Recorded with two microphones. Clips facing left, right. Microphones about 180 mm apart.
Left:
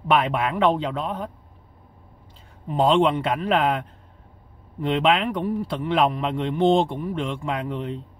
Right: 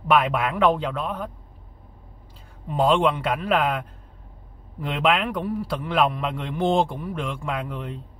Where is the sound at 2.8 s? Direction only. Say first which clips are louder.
Left 1 dB; 30° left (ahead or behind).